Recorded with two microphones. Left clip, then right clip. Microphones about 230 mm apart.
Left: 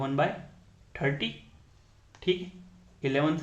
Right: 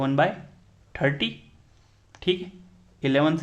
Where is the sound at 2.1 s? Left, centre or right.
Right.